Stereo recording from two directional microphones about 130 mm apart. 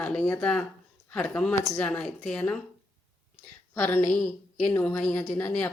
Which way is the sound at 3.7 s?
15° left (ahead or behind).